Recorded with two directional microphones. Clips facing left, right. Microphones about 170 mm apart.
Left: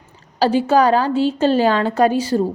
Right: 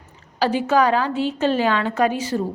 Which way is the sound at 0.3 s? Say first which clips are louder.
Left 4 dB; 35° left (ahead or behind).